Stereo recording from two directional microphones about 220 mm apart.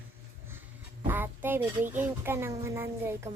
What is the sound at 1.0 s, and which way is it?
Speech, 10° right (ahead or behind).